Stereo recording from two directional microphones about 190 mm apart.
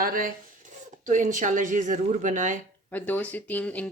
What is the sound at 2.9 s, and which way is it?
Speech, 10° left (ahead or behind).